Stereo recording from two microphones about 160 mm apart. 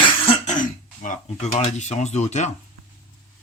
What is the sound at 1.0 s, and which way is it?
Speech, 50° left (ahead or behind).